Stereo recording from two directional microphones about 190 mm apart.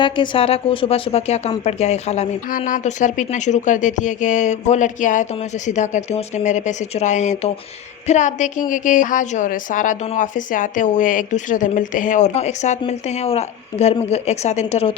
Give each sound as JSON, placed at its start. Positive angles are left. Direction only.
{"t": 0.0, "sound": "a woman's voice", "side_deg": 25}